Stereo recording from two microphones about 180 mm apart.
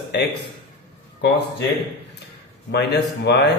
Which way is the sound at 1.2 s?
65° left (ahead or behind).